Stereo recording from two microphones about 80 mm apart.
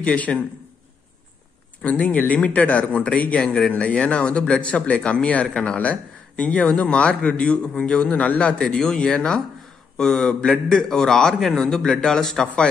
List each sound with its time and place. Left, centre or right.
0.0 s speech: centre
1.8 s speech: centre